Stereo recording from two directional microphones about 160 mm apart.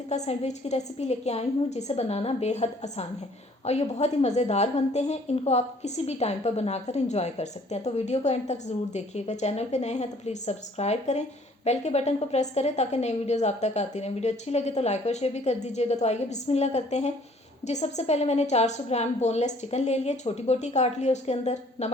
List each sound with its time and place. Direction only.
0.1 s a woman's voice: 45° left (ahead or behind)